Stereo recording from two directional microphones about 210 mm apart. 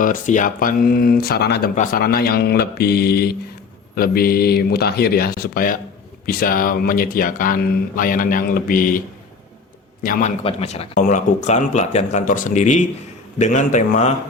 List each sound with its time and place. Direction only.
0.0 s speech: 40° left (ahead or behind)
1.7 s speech: 40° left (ahead or behind)
10.0 s speech: 40° left (ahead or behind)